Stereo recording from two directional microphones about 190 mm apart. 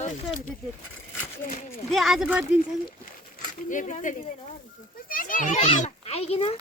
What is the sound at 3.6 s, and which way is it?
A child's voice, 40° left (ahead or behind).